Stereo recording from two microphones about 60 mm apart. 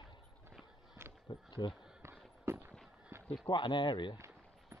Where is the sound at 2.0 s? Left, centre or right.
Right.